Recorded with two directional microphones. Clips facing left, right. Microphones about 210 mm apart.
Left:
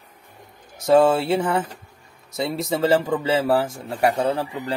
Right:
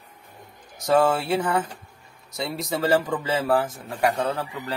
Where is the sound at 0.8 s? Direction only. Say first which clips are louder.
Left 4 dB; 25° left (ahead or behind).